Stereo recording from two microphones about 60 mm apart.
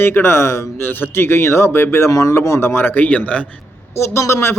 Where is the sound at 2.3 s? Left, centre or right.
Left.